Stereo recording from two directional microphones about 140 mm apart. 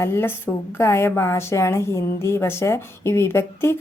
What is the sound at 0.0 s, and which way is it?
A woman's voice, 15° left (ahead or behind).